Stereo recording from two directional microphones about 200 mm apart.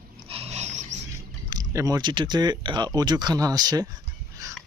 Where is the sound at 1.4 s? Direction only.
20° right (ahead or behind).